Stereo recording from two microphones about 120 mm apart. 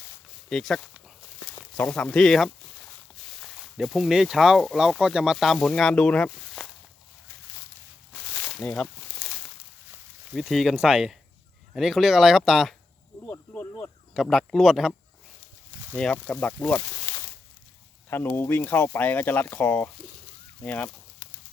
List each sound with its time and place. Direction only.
0.5 s speech: 5° left (ahead or behind)
8.4 s speech: 10° left (ahead or behind)
10.3 s speech: centre (ahead or behind)
13.5 s a sound: 15° left (ahead or behind)
14.1 s speech: centre (ahead or behind)
16.0 s speech: 5° left (ahead or behind)
18.3 s speech: 15° left (ahead or behind)